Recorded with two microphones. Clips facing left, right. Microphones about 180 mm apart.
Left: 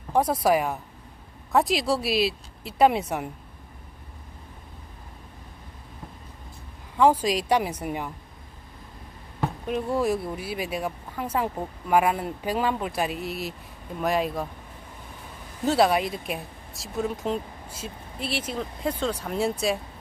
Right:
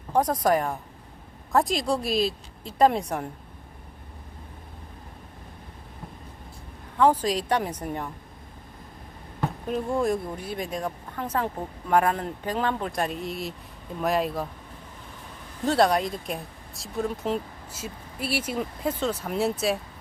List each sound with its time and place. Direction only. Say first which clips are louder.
0.1 s speech: left 1 dB; 10° left (ahead or behind)
6.9 s speech: left 1 dB; 10° left (ahead or behind)
9.6 s speech: even; 5° left (ahead or behind)
15.6 s speech: even; 5° left (ahead or behind)